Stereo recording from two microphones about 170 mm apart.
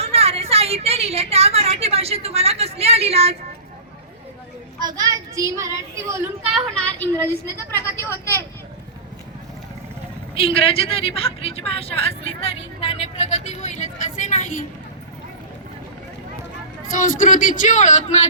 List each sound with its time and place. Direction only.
0.0 s a woman's voice: 35° right (ahead or behind)
4.8 s speech: 20° right (ahead or behind)
7.2 s a woman's voice: 15° left (ahead or behind)
10.3 s a woman's voice: 35° left (ahead or behind); by 14.7 s 50° left (ahead or behind)
16.9 s a woman's voice: 50° left (ahead or behind)